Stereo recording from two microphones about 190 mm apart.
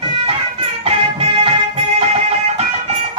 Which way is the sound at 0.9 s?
30° right (ahead or behind).